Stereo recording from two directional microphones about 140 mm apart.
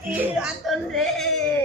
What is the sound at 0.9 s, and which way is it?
Speech, centre (ahead or behind).